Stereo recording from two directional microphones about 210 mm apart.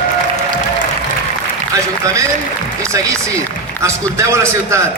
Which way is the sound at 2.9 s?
15° right (ahead or behind).